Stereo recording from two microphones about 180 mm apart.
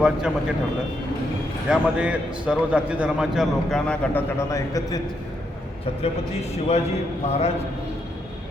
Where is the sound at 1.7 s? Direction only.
5° right (ahead or behind).